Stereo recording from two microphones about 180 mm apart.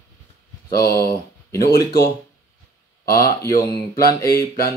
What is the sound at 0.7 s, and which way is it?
Speech, 60° left (ahead or behind).